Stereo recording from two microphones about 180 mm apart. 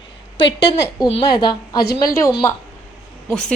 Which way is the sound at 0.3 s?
75° left (ahead or behind).